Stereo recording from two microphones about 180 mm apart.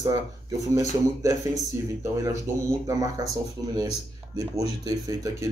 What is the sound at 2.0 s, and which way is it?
Speech, 15° right (ahead or behind).